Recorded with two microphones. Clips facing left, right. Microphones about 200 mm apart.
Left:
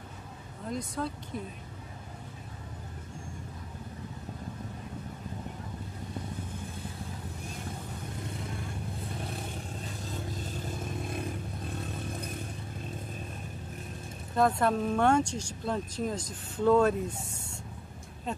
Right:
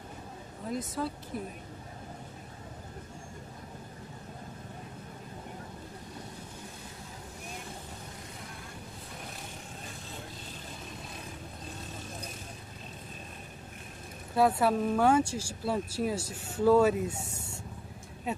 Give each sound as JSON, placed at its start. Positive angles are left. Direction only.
{"t": 0.7, "sound": "speech", "side_deg": -5}
{"t": 10.8, "sound": "vehicle", "side_deg": 55}
{"t": 14.3, "sound": "speech", "side_deg": -5}